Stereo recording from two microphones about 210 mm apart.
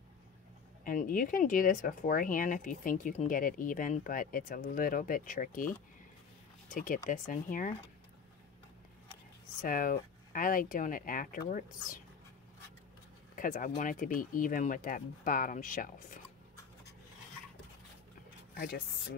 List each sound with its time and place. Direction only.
0.8 s speech: 40° left (ahead or behind)
9.6 s speech: 40° left (ahead or behind)
13.4 s speech: 40° left (ahead or behind)